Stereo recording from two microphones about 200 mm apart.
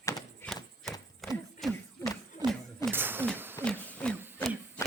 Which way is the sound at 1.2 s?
Centre (ahead or behind).